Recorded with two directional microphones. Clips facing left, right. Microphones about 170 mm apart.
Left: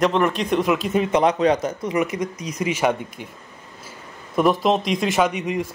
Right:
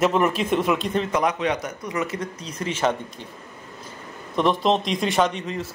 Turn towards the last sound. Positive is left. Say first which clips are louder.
# left 2 dB
turn(degrees=15)  # may be behind; listen again after turning